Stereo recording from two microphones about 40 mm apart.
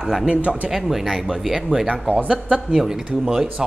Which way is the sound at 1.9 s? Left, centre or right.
Right.